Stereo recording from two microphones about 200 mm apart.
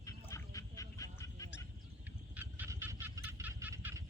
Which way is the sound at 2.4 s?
10° right (ahead or behind).